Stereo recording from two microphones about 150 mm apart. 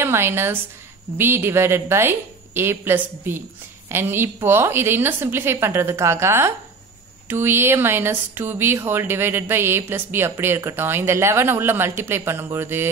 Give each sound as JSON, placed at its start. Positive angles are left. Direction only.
{"t": 0.0, "sound": "a woman's voice", "side_deg": -15}